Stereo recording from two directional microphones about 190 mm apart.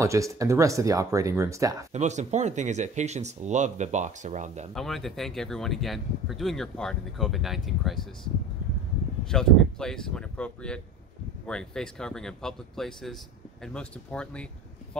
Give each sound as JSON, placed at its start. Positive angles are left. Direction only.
{"t": 0.0, "sound": "speech", "side_deg": -15}
{"t": 1.9, "sound": "speech", "side_deg": -35}
{"t": 4.7, "sound": "speech", "side_deg": 0}
{"t": 9.3, "sound": "speech", "side_deg": 5}